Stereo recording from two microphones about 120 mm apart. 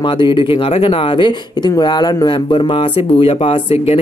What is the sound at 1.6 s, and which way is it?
Speech, 35° left (ahead or behind).